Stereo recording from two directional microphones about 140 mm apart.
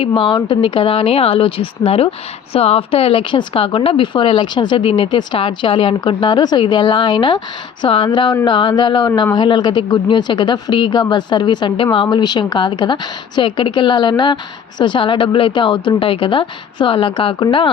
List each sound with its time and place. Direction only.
0.1 s speech: 35° left (ahead or behind)